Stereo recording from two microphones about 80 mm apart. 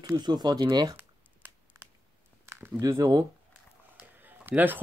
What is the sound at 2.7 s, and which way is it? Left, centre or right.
Speech, right.